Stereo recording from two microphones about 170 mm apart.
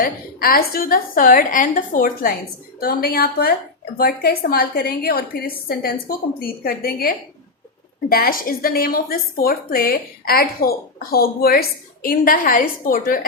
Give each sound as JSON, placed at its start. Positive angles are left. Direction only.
{"t": 0.0, "sound": "a woman's voice", "side_deg": 60}
{"t": 8.1, "sound": "a woman's voice", "side_deg": 60}